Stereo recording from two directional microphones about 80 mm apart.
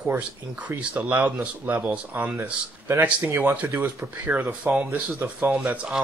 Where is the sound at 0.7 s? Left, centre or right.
Centre.